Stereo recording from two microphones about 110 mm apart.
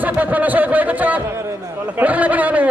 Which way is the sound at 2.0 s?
15° right (ahead or behind).